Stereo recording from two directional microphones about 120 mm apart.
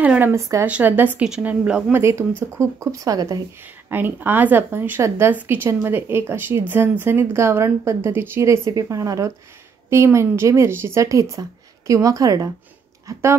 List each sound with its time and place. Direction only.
0.0 s speech: 10° right (ahead or behind)
0.3 s a woman's voice: 25° right (ahead or behind)
0.7 s a woman's voice: 15° right (ahead or behind); by 3.4 s 30° right (ahead or behind)
3.9 s a woman's voice: 15° right (ahead or behind)